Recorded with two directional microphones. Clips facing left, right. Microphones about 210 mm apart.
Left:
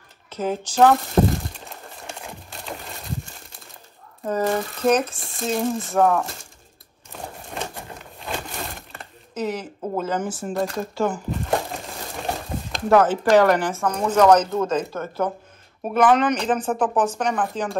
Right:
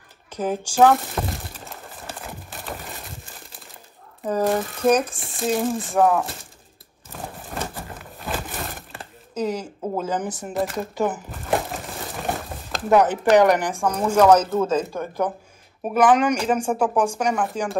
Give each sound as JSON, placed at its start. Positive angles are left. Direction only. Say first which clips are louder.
{"t": 0.3, "sound": "speech", "louder": "even", "side_deg": -15}
{"t": 1.2, "sound": "speech", "louder": "left 10 dB", "side_deg": 30}
{"t": 2.0, "sound": "a sound", "louder": "right 1 dB", "side_deg": -5}
{"t": 4.5, "sound": "speech", "louder": "right 1 dB", "side_deg": 0}
{"t": 7.1, "sound": "a sound", "louder": "right 1 dB", "side_deg": -5}
{"t": 10.5, "sound": "speech", "louder": "even", "side_deg": -5}
{"t": 11.2, "sound": "crumpling", "louder": "even", "side_deg": 0}
{"t": 12.9, "sound": "speech", "louder": "even", "side_deg": -20}